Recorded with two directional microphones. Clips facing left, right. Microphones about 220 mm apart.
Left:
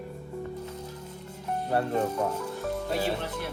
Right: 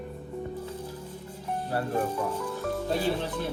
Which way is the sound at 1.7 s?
25° left (ahead or behind).